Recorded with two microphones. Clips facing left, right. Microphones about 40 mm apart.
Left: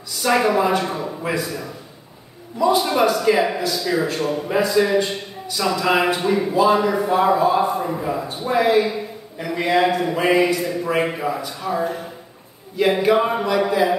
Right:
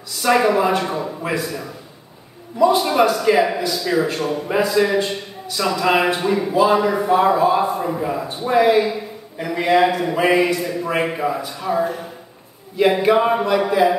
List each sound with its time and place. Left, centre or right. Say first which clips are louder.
0.1 s a man's voice: right 2 dB; centre